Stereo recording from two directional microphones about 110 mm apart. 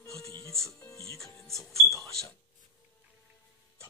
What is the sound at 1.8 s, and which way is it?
Cash register, 30° left (ahead or behind).